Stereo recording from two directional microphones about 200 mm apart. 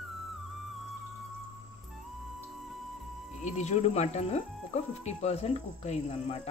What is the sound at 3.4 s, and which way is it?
Speech, 35° left (ahead or behind).